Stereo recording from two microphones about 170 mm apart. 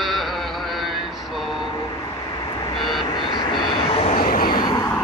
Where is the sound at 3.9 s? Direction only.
40° left (ahead or behind).